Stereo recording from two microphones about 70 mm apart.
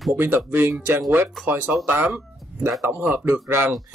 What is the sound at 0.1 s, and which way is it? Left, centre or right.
Speech, right.